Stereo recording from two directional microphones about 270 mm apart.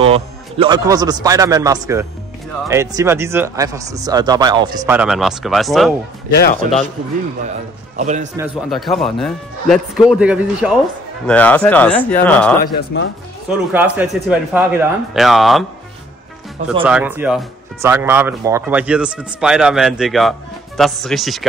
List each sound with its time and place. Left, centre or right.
0.0 s speech: right; by 5.9 s centre
6.3 s a man's voice: left
8.0 s a man's voice: right
8.4 s speech: centre
12.6 s a man's voice: left
13.5 s speech: centre
16.8 s speech: centre